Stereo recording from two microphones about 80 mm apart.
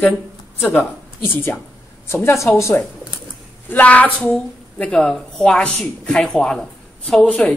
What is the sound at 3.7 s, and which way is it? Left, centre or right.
A woman's voice, centre.